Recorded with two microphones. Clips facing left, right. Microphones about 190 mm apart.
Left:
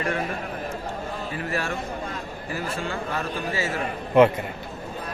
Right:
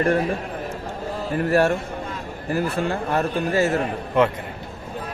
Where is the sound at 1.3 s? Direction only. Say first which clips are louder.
Right 12 dB; 55° right (ahead or behind).